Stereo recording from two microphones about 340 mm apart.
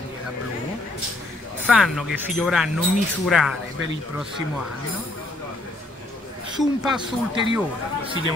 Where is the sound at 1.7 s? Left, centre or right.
Centre.